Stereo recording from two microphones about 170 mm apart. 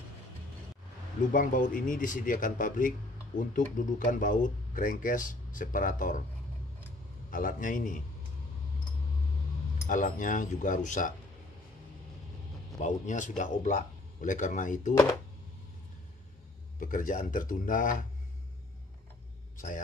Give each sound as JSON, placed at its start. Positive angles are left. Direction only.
{"t": 1.3, "sound": "speech", "side_deg": 50}
{"t": 7.2, "sound": "speech", "side_deg": 55}
{"t": 9.8, "sound": "speech", "side_deg": 50}
{"t": 12.8, "sound": "speech", "side_deg": 45}
{"t": 16.8, "sound": "speech", "side_deg": 50}
{"t": 19.5, "sound": "a sound", "side_deg": 50}